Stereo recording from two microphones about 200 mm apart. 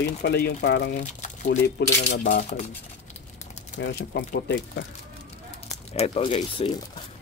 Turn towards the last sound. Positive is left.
turn(degrees=30)  # may be behind; listen again after turning